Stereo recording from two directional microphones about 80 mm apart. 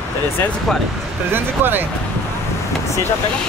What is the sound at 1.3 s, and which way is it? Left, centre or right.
Speech, right.